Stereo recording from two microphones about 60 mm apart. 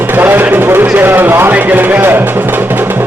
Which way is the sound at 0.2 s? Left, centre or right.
Right.